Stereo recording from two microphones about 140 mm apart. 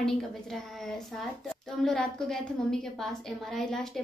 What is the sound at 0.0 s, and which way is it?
A woman's voice, centre (ahead or behind).